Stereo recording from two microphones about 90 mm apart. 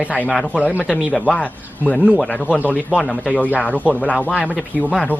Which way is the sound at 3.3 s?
20° left (ahead or behind).